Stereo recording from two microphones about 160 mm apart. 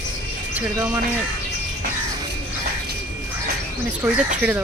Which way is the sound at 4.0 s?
10° right (ahead or behind).